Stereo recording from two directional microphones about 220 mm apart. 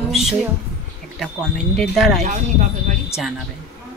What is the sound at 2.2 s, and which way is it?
Speech, 35° right (ahead or behind).